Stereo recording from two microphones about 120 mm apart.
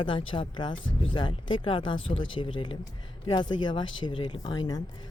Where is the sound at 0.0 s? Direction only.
45° left (ahead or behind).